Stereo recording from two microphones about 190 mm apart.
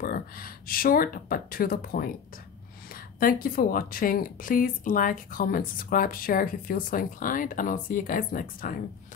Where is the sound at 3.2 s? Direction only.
50° left (ahead or behind).